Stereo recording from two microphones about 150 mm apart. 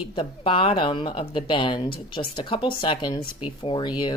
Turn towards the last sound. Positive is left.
turn(degrees=30)  # may be behind; listen again after turning